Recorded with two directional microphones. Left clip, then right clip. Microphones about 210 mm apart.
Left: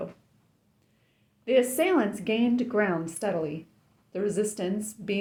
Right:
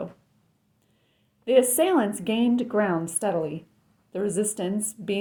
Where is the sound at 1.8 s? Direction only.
35° right (ahead or behind).